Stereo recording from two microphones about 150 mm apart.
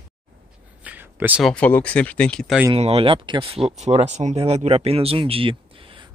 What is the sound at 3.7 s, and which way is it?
Speech, 50° right (ahead or behind).